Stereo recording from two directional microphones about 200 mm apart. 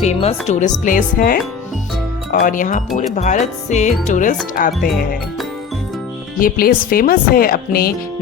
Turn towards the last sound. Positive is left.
turn(degrees=45)  # may be behind; listen again after turning